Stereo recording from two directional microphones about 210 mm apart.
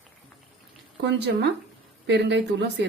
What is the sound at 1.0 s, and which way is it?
A woman's voice, 55° right (ahead or behind).